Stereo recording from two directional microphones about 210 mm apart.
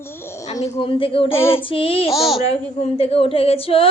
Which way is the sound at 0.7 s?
25° left (ahead or behind).